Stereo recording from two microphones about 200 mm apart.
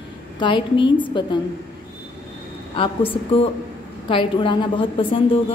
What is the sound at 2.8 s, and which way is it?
A woman's voice, 25° left (ahead or behind).